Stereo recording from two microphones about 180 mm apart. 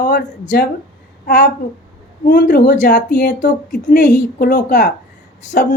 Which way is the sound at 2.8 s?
45° left (ahead or behind).